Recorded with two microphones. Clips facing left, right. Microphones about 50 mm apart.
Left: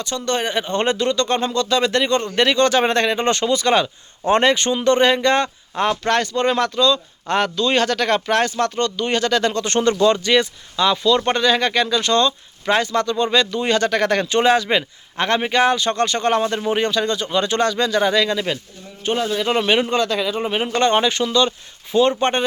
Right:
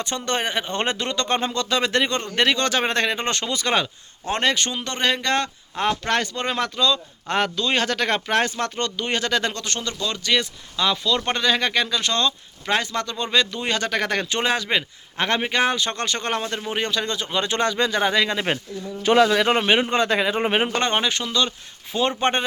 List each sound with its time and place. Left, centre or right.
0.0 s speech: centre
4.3 s a man's voice: centre
5.8 s speech: centre
9.6 s speech: left
10.3 s a man's voice: centre
19.1 s a man's voice: right
19.5 s a man's voice: centre; by 20.7 s right
20.7 s speech: centre